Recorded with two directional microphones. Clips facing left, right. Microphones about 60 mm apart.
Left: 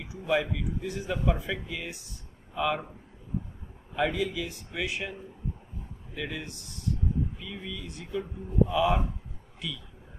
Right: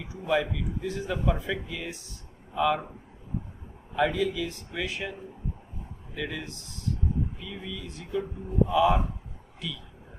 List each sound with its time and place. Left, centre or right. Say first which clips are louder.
0.0 s a man's voice: right 1 dB; centre
3.9 s a man's voice: right 2 dB; centre
6.1 s a man's voice: right 2 dB; centre